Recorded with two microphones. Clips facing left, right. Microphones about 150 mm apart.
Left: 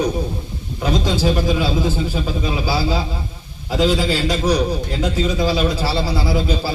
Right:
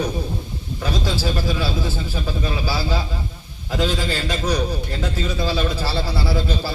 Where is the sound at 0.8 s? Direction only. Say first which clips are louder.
Left 5 dB; 20° left (ahead or behind).